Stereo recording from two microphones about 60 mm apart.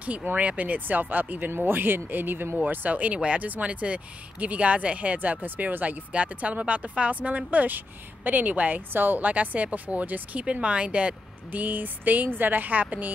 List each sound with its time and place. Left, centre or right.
0.0 s speech: right